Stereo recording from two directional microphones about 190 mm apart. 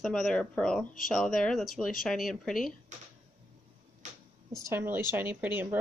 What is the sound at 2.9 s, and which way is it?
Speech, 40° right (ahead or behind).